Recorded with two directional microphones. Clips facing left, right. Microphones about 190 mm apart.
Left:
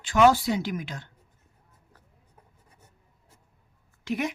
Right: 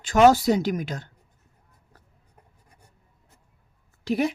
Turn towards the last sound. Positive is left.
turn(degrees=-35)  # may be behind; listen again after turning